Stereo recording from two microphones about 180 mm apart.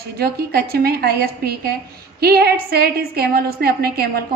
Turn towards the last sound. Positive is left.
turn(degrees=-60)  # may be behind; listen again after turning